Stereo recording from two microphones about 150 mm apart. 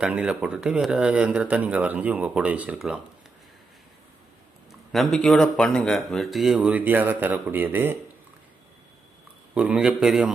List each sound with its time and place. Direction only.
0.0 s speech: 10° right (ahead or behind)
4.7 s speech: centre (ahead or behind)
9.6 s speech: 5° right (ahead or behind)